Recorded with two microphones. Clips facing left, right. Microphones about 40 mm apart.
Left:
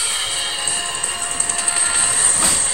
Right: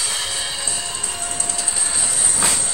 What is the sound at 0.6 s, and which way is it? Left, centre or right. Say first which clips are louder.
Music: left 4 dB; left.